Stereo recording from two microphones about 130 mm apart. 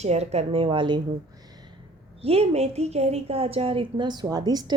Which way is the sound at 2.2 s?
50° right (ahead or behind).